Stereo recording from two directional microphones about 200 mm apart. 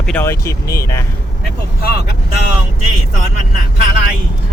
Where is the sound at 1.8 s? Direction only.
50° left (ahead or behind).